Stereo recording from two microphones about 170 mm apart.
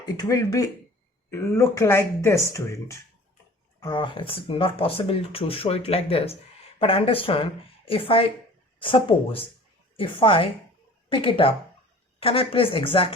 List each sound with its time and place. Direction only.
0.0 s speech: 20° left (ahead or behind)